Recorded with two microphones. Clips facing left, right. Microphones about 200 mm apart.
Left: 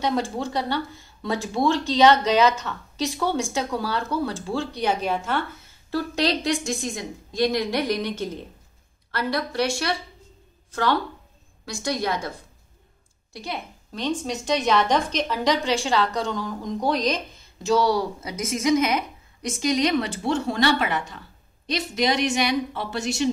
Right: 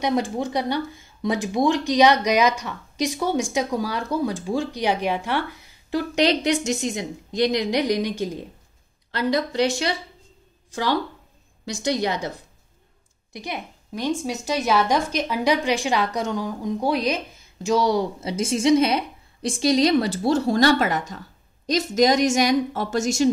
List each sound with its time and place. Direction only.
0.0 s a woman's voice: 15° right (ahead or behind); by 23.3 s 45° right (ahead or behind)